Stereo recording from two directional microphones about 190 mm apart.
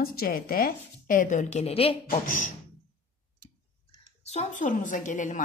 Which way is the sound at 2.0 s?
45° left (ahead or behind).